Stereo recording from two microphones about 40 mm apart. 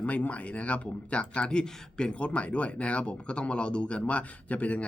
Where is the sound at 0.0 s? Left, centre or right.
Left.